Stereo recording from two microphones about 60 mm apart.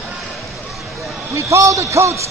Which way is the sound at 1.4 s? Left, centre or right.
Right.